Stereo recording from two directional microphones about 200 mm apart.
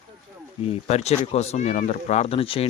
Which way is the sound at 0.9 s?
30° left (ahead or behind).